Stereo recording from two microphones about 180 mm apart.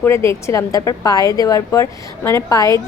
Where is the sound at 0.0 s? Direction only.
15° left (ahead or behind).